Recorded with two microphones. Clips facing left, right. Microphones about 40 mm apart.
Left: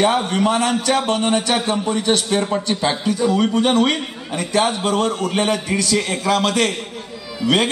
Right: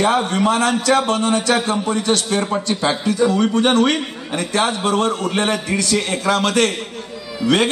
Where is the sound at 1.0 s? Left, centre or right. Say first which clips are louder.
Right 1 dB; centre.